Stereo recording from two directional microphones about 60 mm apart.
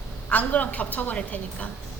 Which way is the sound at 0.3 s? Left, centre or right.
Left.